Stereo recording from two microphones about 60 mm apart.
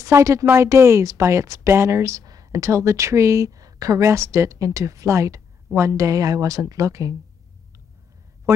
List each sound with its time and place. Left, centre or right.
0.0 s a woman's voice: right
2.2 s speech: right
4.0 s a woman's voice: right